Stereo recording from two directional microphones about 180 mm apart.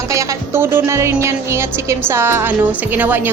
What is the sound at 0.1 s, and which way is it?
A woman's voice, 15° right (ahead or behind).